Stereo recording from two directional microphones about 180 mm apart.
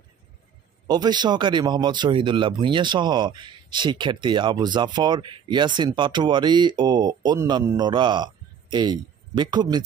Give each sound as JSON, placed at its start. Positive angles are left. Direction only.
{"t": 0.8, "sound": "speech", "side_deg": -25}